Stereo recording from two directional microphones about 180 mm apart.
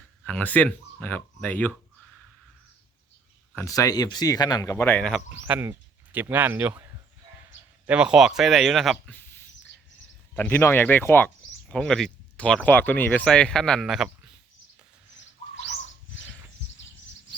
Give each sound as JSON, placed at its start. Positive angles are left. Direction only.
{"t": 0.3, "sound": "speech", "side_deg": 10}
{"t": 3.5, "sound": "speech", "side_deg": 15}
{"t": 5.3, "sound": "speech", "side_deg": -10}
{"t": 7.9, "sound": "speech", "side_deg": -5}
{"t": 9.1, "sound": "bird", "side_deg": 10}
{"t": 10.3, "sound": "speech", "side_deg": 10}